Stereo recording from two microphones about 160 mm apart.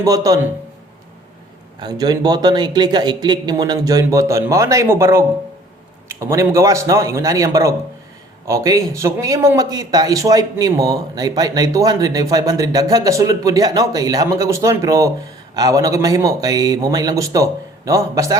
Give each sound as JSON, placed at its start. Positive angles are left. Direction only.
{"t": 0.0, "sound": "speech", "side_deg": -20}
{"t": 1.8, "sound": "speech", "side_deg": -25}